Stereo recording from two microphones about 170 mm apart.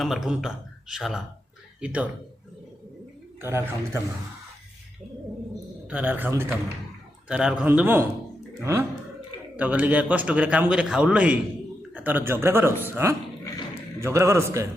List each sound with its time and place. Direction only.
0.0 s a man's voice: centre (ahead or behind)
3.4 s a man's voice: 15° right (ahead or behind)
5.9 s a man's voice: 10° right (ahead or behind)
9.6 s a man's voice: 10° right (ahead or behind)